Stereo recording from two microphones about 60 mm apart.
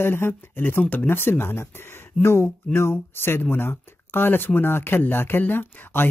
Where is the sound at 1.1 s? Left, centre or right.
Left.